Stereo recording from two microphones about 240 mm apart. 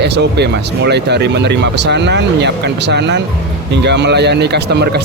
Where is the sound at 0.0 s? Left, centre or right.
Right.